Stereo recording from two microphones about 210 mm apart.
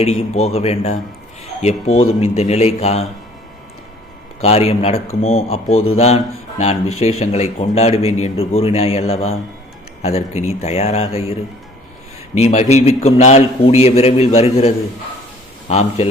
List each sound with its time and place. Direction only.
0.0 s speech: 30° left (ahead or behind)
1.9 s a man's voice: 85° left
2.2 s speech: 30° left (ahead or behind)
4.4 s a man's voice: 30° left (ahead or behind)
5.6 s a man's voice: 80° left
5.9 s a man's voice: 30° left (ahead or behind)
12.3 s a man's voice: 30° left (ahead or behind)
15.7 s speech: 30° left (ahead or behind)